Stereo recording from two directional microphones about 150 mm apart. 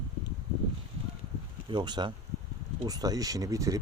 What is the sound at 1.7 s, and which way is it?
Speech, 30° right (ahead or behind).